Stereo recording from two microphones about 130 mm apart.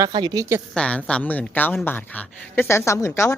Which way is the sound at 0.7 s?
10° left (ahead or behind).